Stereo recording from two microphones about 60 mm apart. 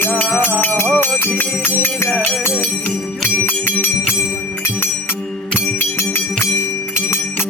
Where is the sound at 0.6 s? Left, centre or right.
Left.